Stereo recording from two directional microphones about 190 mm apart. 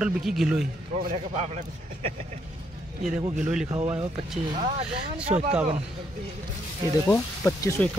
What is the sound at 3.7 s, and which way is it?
Speech, 25° right (ahead or behind).